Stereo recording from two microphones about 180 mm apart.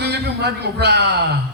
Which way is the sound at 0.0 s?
70° right (ahead or behind).